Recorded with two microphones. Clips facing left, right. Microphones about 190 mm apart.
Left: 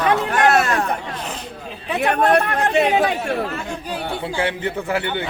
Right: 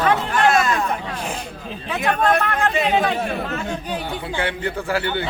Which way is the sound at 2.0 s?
65° left (ahead or behind).